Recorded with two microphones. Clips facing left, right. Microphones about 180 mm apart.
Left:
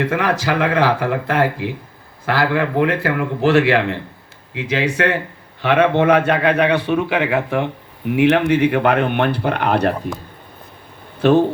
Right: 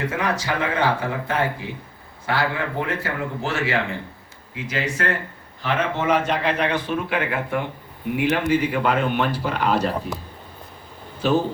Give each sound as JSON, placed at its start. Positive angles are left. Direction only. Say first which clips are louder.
{"t": 0.0, "sound": "a man's voice", "louder": "left 6 dB", "side_deg": 70}
{"t": 11.2, "sound": "speech", "louder": "left 7 dB", "side_deg": 60}